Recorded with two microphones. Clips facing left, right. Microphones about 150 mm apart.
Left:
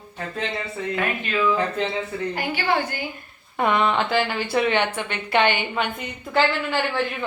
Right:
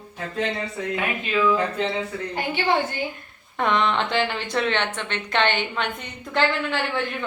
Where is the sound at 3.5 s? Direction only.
5° left (ahead or behind).